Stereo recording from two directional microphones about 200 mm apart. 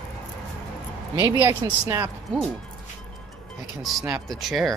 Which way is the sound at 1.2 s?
15° right (ahead or behind).